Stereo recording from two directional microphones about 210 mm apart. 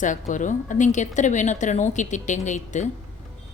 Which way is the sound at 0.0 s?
35° left (ahead or behind).